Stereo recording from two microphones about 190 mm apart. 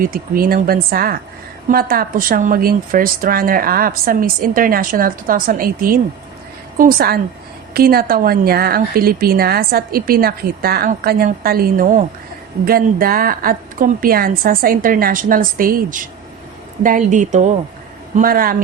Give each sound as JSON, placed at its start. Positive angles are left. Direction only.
{"t": 0.0, "sound": "a woman's voice", "side_deg": -50}